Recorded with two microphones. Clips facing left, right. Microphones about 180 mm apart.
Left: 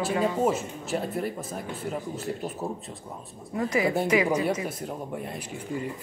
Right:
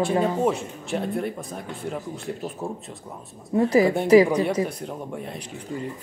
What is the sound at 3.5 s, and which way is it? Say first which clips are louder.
Speech: right 7 dB; 30° right (ahead or behind).